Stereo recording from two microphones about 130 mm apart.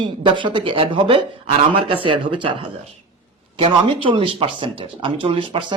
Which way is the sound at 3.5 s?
45° right (ahead or behind).